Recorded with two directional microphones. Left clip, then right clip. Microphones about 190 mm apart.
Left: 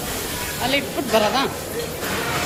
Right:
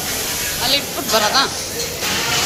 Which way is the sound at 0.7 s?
40° left (ahead or behind).